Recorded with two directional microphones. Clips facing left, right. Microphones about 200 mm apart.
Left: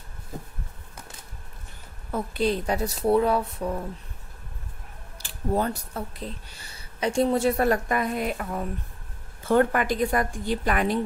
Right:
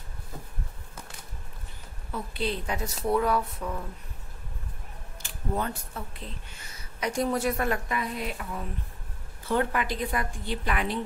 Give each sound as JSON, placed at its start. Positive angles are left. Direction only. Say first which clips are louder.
{"t": 2.0, "sound": "speech", "louder": "left 6 dB", "side_deg": 45}
{"t": 5.2, "sound": "a woman's voice", "louder": "left 5 dB", "side_deg": 35}